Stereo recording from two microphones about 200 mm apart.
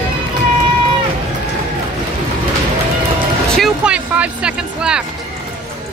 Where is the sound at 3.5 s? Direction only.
Centre (ahead or behind).